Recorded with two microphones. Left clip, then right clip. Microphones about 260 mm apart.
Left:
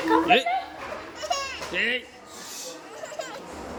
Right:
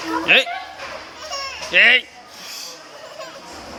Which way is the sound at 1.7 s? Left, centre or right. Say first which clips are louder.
Right 14 dB; centre.